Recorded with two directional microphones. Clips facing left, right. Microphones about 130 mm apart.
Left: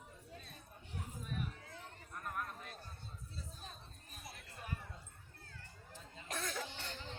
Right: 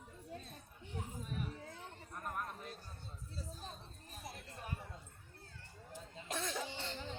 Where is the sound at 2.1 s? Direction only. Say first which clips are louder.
Right 1 dB; 30° right (ahead or behind).